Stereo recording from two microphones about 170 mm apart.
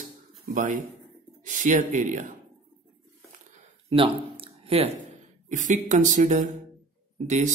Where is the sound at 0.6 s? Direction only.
50° right (ahead or behind).